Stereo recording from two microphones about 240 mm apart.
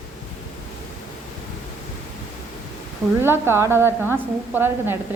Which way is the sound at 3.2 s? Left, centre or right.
Centre.